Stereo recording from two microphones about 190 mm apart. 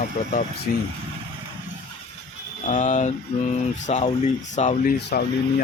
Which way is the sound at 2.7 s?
40° left (ahead or behind).